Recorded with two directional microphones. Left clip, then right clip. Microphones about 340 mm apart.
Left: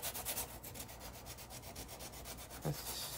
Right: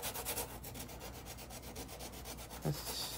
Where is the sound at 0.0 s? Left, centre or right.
Centre.